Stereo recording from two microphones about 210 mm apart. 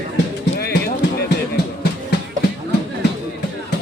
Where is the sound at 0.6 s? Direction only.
50° left (ahead or behind).